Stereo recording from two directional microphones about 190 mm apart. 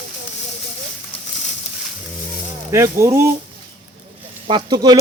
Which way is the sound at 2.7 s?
15° right (ahead or behind).